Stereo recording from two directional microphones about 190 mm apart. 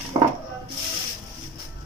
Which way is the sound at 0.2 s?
25° right (ahead or behind).